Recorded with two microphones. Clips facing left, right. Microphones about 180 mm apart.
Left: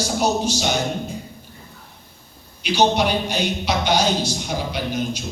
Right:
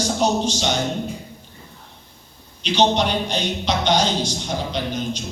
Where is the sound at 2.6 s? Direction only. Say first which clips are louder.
Even; 10° left (ahead or behind).